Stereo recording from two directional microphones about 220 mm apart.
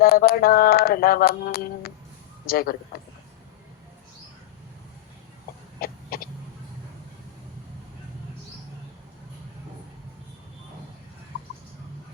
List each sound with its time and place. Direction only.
0.0 s a sound: 45° left (ahead or behind)
2.5 s a man's voice: 40° left (ahead or behind)
5.8 s chicken: 40° left (ahead or behind)